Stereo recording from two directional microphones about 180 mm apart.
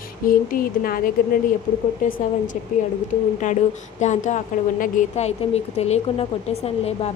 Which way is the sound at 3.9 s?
40° left (ahead or behind).